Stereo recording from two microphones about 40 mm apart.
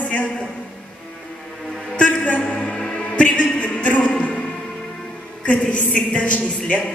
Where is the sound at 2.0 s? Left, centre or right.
Left.